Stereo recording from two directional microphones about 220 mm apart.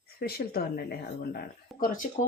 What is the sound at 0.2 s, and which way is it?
Speech, 45° left (ahead or behind).